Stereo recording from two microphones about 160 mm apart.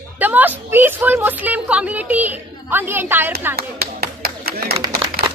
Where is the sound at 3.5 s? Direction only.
75° right (ahead or behind).